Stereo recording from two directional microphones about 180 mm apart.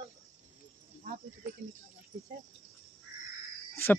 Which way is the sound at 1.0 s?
55° right (ahead or behind).